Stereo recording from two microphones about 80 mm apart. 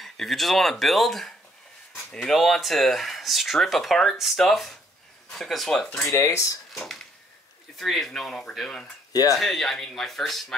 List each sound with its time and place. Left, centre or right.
0.0 s speech: centre
6.1 s speech: left
6.7 s speech: centre
9.1 s speech: left
9.4 s speech: centre